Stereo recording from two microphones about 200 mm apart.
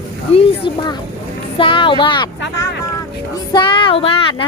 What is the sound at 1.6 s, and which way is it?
Speech, 25° left (ahead or behind).